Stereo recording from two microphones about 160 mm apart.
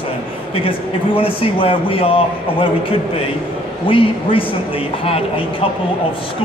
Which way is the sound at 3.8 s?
35° left (ahead or behind).